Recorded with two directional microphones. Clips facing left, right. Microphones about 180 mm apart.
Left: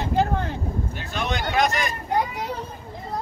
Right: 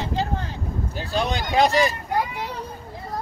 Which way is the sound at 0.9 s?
35° right (ahead or behind).